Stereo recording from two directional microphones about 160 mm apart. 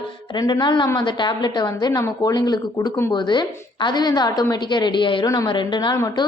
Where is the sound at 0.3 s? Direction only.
25° left (ahead or behind).